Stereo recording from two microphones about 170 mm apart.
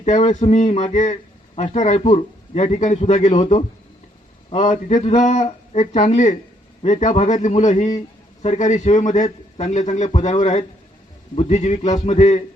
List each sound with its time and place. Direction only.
0.0 s a man's voice: 40° left (ahead or behind)